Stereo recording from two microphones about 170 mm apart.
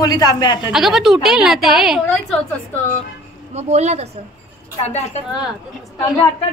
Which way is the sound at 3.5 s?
40° right (ahead or behind).